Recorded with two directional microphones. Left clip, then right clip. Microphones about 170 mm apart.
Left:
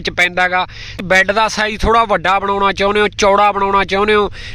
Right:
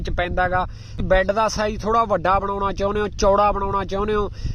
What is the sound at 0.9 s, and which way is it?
Speech, 20° left (ahead or behind).